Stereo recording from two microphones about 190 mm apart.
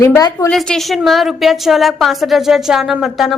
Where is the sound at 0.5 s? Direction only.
5° left (ahead or behind).